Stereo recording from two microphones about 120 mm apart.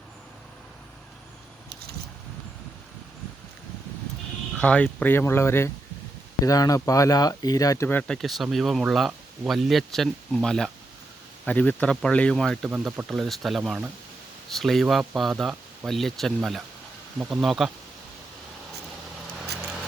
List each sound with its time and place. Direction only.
4.5 s speech: 10° left (ahead or behind); by 7.9 s 30° left (ahead or behind)
7.9 s speech: 10° left (ahead or behind)
12.7 s speech: 5° right (ahead or behind)